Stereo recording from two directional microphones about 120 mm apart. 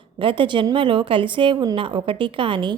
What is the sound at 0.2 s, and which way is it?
A woman's voice, 45° right (ahead or behind).